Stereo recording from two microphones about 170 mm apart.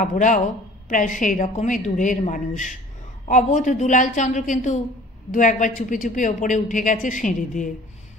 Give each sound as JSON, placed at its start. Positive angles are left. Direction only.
{"t": 0.0, "sound": "speech", "side_deg": 50}